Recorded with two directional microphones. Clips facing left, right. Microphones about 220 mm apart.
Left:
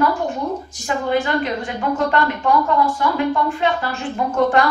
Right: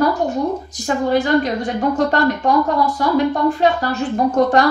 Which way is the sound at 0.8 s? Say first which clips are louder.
Right 3 dB; 40° right (ahead or behind).